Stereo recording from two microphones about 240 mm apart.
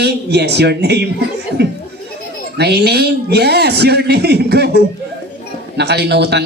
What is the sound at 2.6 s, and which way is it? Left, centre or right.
Speech, right.